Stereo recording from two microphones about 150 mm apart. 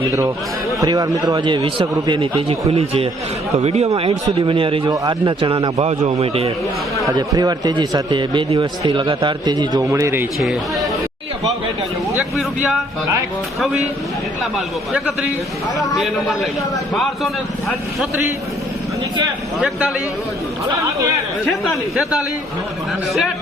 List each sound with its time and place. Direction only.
0.0 s a man's voice: 20° right (ahead or behind); by 6.5 s 40° right (ahead or behind)
7.1 s a man's voice: 25° right (ahead or behind)
14.5 s a man's voice: 5° right (ahead or behind)
19.5 s a man's voice: centre (ahead or behind)
20.7 s a man's voice: 20° right (ahead or behind)